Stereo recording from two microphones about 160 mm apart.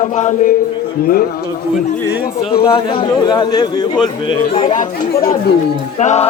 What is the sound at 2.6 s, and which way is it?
A man's voice, 30° left (ahead or behind).